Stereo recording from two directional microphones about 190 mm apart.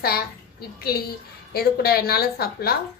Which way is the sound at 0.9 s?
55° left (ahead or behind).